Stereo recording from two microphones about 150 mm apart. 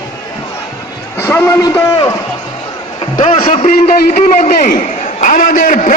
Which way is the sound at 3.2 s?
45° left (ahead or behind).